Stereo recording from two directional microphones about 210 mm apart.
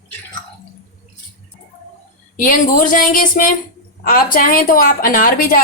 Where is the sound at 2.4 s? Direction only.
40° left (ahead or behind).